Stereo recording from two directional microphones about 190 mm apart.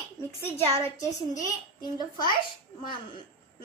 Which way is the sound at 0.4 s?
15° left (ahead or behind).